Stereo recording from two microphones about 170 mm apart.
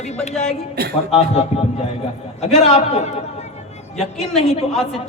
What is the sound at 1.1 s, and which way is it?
A man's voice, 35° left (ahead or behind).